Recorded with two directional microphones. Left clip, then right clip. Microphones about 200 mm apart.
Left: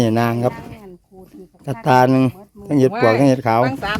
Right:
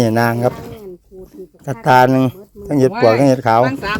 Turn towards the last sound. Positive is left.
turn(degrees=40)  # may be behind; listen again after turning